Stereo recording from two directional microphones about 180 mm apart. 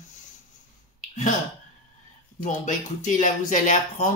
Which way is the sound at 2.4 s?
45° left (ahead or behind).